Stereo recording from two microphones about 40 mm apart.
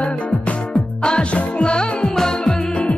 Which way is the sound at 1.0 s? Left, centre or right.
Left.